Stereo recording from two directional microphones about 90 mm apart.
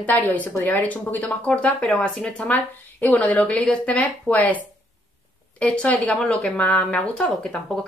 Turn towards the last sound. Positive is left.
turn(degrees=10)  # may be behind; listen again after turning